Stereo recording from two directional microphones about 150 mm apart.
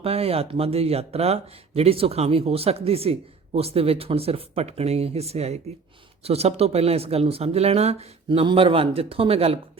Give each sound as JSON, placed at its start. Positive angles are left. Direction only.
{"t": 0.0, "sound": "speech", "side_deg": -40}